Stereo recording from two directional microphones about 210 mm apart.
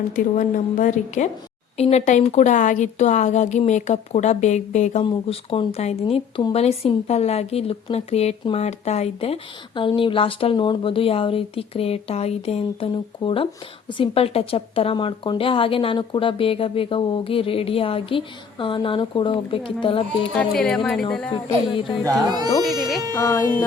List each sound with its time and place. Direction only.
0.3 s speech: 35° left (ahead or behind)
20.2 s speech: 5° left (ahead or behind)
21.7 s speech: 25° left (ahead or behind)
23.1 s speech: 15° left (ahead or behind)